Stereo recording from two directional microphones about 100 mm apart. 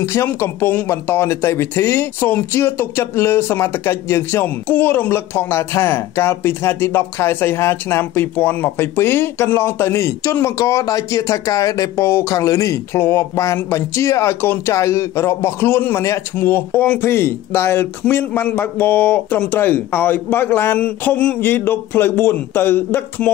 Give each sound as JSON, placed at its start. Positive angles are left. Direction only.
{"t": 0.0, "sound": "speech", "side_deg": 25}